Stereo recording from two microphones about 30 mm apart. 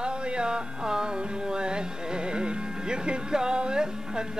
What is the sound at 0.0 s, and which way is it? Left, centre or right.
Music, right.